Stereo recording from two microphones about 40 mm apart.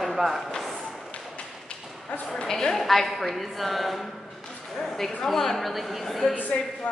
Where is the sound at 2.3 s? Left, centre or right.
Centre.